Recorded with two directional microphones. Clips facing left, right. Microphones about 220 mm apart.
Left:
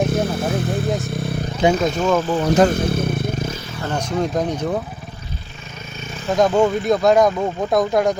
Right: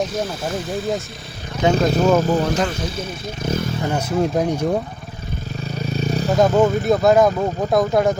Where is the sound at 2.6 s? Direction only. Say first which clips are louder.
Left 7 dB; 55° left (ahead or behind).